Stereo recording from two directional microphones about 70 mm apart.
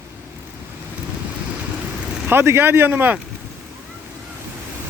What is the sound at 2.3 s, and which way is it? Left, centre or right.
Speech, right.